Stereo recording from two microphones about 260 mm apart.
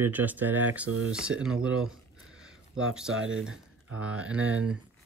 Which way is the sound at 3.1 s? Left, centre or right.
Right.